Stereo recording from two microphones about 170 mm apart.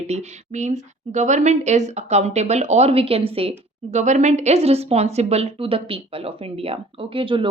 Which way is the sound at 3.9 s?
45° right (ahead or behind).